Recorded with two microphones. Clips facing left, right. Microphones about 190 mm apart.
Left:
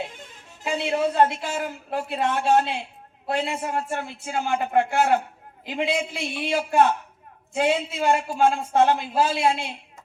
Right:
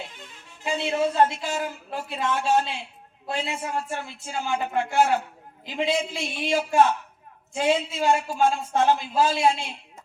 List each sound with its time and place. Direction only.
0.0 s a woman's voice: 50° left (ahead or behind)